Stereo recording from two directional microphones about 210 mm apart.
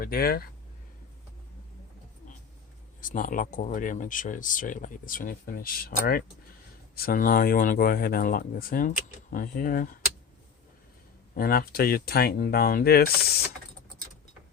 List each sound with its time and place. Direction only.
0.0 s speech: 45° left (ahead or behind)
3.0 s speech: 40° left (ahead or behind)
11.3 s speech: 45° left (ahead or behind)